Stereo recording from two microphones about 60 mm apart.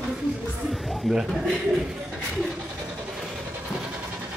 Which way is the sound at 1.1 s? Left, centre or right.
Centre.